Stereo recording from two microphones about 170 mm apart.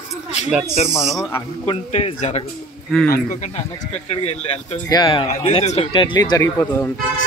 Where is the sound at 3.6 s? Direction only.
40° left (ahead or behind).